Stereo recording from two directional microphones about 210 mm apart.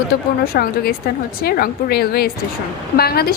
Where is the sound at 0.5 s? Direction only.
45° left (ahead or behind).